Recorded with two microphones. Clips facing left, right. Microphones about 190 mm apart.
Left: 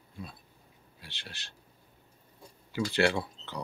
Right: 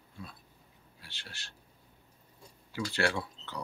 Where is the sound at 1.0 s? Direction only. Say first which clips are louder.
Left 3 dB; 20° left (ahead or behind).